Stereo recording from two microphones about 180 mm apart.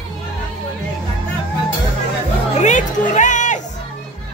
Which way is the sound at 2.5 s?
40° left (ahead or behind).